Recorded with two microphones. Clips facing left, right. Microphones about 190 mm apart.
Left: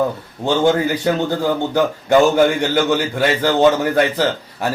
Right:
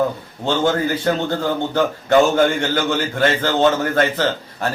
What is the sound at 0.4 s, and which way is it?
A man's voice, 15° left (ahead or behind).